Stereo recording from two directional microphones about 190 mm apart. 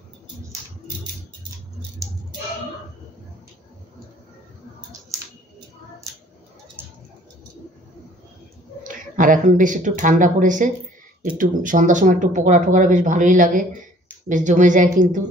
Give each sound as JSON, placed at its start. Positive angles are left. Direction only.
{"t": 6.8, "sound": "bird", "side_deg": -10}
{"t": 8.8, "sound": "a woman's voice", "side_deg": -45}